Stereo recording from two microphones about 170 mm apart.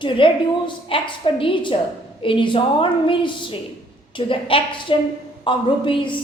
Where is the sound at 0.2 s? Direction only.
30° left (ahead or behind).